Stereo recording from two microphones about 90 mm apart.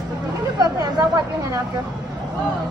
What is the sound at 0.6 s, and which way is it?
Chatter, 45° right (ahead or behind).